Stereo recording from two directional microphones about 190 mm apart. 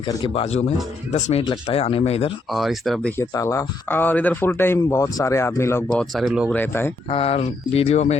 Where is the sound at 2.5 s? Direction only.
Centre (ahead or behind).